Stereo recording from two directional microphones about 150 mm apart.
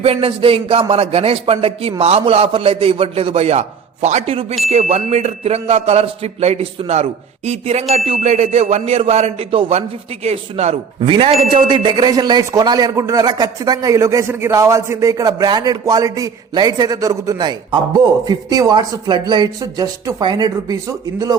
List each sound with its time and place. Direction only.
0.0 s a man's voice: 40° right (ahead or behind)
11.1 s speech: 35° right (ahead or behind)